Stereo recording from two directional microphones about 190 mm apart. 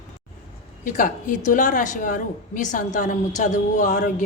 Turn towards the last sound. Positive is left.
turn(degrees=40)  # may be behind; listen again after turning